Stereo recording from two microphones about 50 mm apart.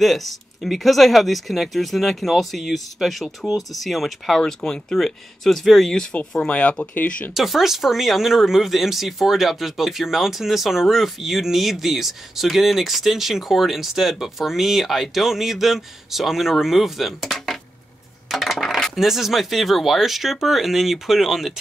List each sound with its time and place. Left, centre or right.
0.0 s speech: centre
4.4 s speech: centre
6.4 s speech: left
7.3 s speech: centre
18.3 s coin: centre
18.9 s speech: centre